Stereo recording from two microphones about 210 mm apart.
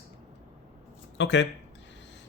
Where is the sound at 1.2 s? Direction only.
55° left (ahead or behind).